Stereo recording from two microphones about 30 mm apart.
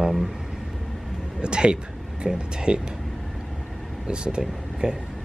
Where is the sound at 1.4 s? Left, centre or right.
Right.